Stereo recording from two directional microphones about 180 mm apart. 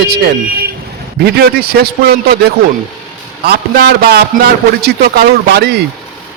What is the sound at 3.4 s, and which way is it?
A man's voice, 60° right (ahead or behind).